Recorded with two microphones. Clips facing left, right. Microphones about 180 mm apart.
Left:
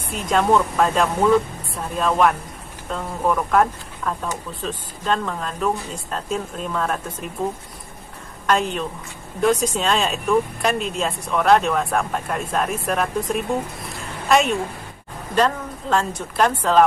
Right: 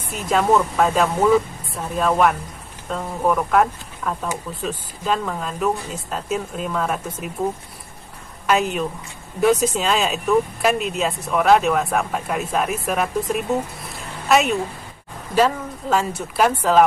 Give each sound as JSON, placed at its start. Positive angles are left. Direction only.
{"t": 0.1, "sound": "speech", "side_deg": -5}
{"t": 8.5, "sound": "speech", "side_deg": -5}
{"t": 13.9, "sound": "a sound", "side_deg": 0}
{"t": 15.3, "sound": "speech", "side_deg": -5}